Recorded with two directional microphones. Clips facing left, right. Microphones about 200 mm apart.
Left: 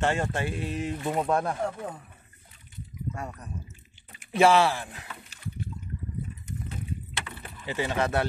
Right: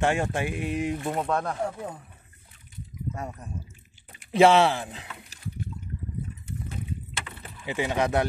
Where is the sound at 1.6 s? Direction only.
5° right (ahead or behind).